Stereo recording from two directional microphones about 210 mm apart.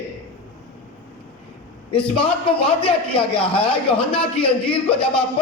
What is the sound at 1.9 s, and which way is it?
A man's voice, 25° left (ahead or behind).